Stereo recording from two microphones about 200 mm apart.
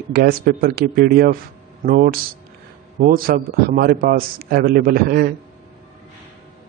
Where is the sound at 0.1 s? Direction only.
50° right (ahead or behind).